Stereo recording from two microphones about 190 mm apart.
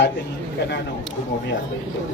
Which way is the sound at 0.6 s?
65° left (ahead or behind).